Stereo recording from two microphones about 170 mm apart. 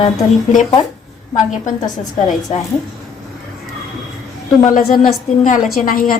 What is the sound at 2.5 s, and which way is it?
Speech, 40° left (ahead or behind).